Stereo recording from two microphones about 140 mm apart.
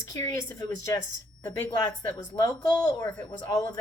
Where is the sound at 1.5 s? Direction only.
20° left (ahead or behind).